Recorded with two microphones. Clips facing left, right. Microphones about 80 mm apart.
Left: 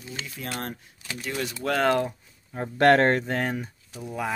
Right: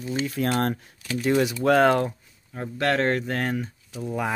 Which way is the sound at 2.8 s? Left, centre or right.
Left.